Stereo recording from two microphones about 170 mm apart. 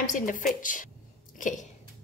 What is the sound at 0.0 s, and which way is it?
Speech, 50° left (ahead or behind).